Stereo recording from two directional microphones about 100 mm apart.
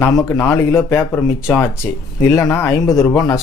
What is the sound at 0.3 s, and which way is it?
Speech, 25° left (ahead or behind).